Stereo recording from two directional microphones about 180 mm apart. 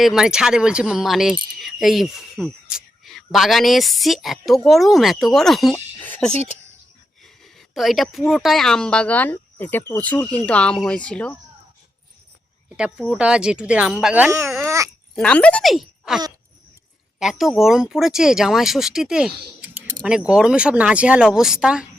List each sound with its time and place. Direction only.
0.0 s speech: centre (ahead or behind)
6.0 s a sound: 10° left (ahead or behind)
7.4 s a sound: centre (ahead or behind)
8.3 s speech: centre (ahead or behind)
12.7 s speech: 5° right (ahead or behind)
15.1 s speech: 5° left (ahead or behind)